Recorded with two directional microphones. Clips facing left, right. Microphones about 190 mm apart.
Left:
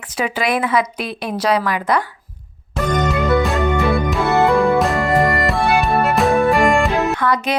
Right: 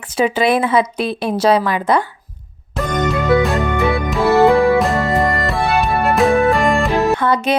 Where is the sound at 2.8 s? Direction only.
Centre (ahead or behind).